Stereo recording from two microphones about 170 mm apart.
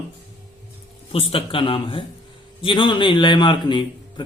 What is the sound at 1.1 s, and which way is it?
A man's voice, 35° left (ahead or behind).